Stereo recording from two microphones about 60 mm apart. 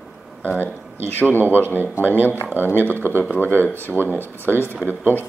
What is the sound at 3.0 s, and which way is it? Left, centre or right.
Speech, right.